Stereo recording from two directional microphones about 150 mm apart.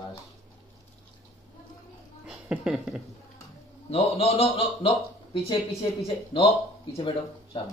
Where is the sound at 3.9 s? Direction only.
45° left (ahead or behind).